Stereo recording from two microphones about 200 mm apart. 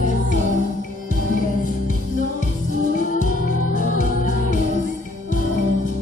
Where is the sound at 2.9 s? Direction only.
40° left (ahead or behind).